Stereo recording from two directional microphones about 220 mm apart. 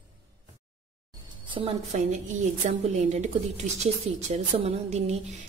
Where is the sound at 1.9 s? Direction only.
35° right (ahead or behind).